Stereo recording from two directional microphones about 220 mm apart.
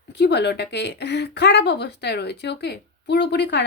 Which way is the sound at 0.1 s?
50° left (ahead or behind).